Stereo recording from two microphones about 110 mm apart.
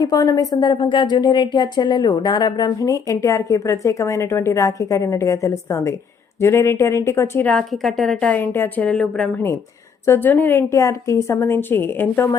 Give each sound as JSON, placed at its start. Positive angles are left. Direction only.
{"t": 0.0, "sound": "a woman's voice", "side_deg": 35}
{"t": 7.4, "sound": "a woman's voice", "side_deg": 5}
{"t": 10.1, "sound": "a woman's voice", "side_deg": 15}